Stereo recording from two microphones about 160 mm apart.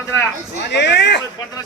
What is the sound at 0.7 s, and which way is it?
Speech, 90° left.